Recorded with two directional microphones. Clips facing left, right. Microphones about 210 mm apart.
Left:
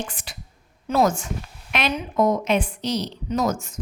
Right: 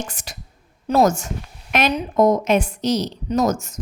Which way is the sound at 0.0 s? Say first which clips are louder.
Right 1 dB; 45° right (ahead or behind).